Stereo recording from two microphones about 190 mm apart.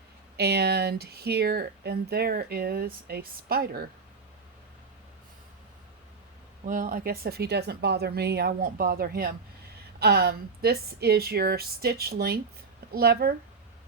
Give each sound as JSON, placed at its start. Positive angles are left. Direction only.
{"t": 0.3, "sound": "speech", "side_deg": -60}
{"t": 6.7, "sound": "speech", "side_deg": -50}